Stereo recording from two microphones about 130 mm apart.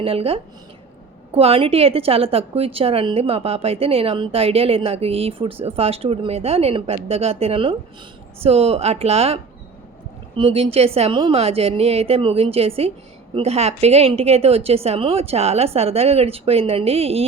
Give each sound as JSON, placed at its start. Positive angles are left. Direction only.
{"t": 0.0, "sound": "a woman's voice", "side_deg": -50}